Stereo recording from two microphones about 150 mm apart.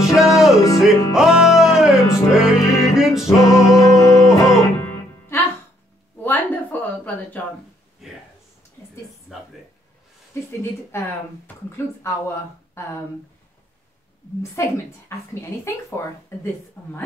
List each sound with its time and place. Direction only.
0.0 s music: centre (ahead or behind)
3.3 s music: 20° left (ahead or behind)
6.2 s a sound: 10° left (ahead or behind)
8.0 s speech: centre (ahead or behind)
9.3 s a sound: centre (ahead or behind)
10.6 s speech: 15° left (ahead or behind)
14.4 s a woman's voice: 20° left (ahead or behind)